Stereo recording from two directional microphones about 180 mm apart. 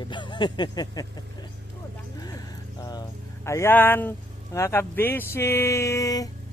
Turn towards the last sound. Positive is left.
turn(degrees=20)  # may be behind; listen again after turning